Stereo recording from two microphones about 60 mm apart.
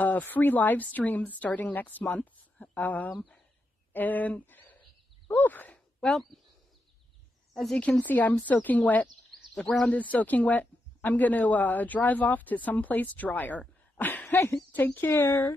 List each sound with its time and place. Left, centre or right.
0.0 s speech: left
5.9 s speech: centre
8.0 s speech: left
9.5 s speech: centre
14.3 s speech: left
14.7 s speech: left